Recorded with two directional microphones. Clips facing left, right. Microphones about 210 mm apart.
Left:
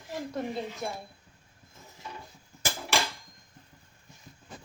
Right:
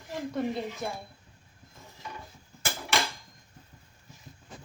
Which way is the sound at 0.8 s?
Centre (ahead or behind).